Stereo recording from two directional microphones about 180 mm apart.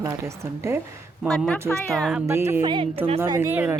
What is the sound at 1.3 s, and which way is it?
Speech, 5° left (ahead or behind).